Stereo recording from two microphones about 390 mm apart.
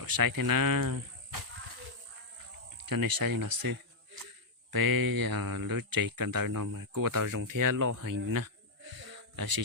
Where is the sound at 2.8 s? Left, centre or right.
Right.